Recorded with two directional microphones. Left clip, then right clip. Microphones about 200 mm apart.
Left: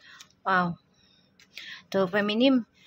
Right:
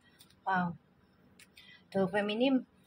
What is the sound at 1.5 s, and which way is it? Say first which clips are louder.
Speech: left 7 dB; 30° left (ahead or behind).